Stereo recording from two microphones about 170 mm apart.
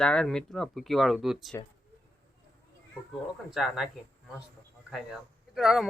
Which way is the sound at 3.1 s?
Centre (ahead or behind).